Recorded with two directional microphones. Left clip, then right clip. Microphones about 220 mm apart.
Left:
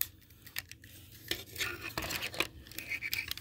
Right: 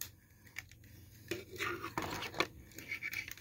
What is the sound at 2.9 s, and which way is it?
Scratch, 25° left (ahead or behind).